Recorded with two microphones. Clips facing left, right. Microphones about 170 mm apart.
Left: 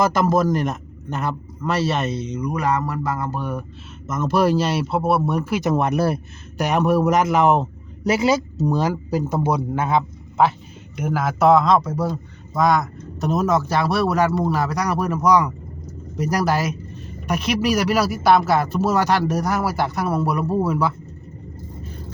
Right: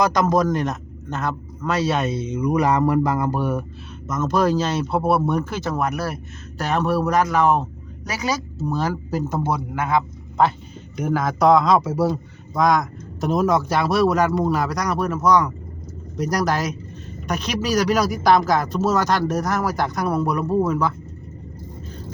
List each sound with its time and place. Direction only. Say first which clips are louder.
0.0 s a man's voice: even; 5° left (ahead or behind)
4.0 s speech: left 1 dB; 5° left (ahead or behind)
5.7 s a man's voice: left 5 dB; 25° left (ahead or behind)
6.6 s speech: left 3 dB; 15° left (ahead or behind)
9.6 s a man's voice: left 1 dB; 25° left (ahead or behind)
10.9 s a man's voice: right 1 dB; 5° left (ahead or behind)